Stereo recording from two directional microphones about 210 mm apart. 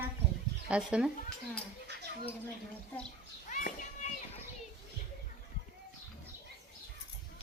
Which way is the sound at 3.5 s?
40° left (ahead or behind).